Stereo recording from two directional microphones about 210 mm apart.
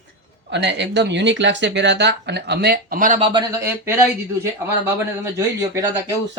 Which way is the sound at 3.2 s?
20° right (ahead or behind).